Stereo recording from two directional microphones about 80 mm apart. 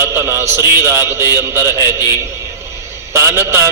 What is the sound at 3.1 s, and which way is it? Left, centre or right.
Speech, right.